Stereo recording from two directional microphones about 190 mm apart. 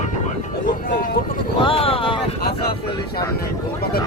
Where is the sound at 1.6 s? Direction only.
30° left (ahead or behind).